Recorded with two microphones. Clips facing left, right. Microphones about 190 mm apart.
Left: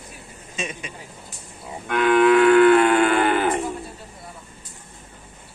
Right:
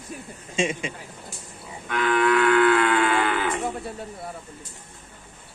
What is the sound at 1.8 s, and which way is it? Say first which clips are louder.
Moo: left 6 dB; 60° left (ahead or behind).